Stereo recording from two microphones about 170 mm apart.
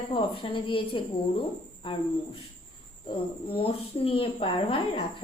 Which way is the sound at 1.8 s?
30° left (ahead or behind).